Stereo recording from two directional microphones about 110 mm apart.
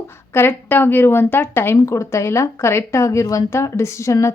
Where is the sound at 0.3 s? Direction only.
20° left (ahead or behind).